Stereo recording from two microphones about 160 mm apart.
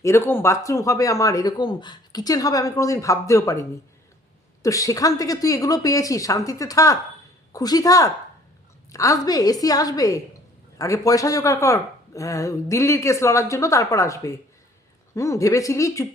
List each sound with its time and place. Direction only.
0.0 s speech: 15° left (ahead or behind)